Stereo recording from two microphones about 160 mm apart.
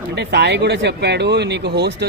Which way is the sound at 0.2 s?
90° right.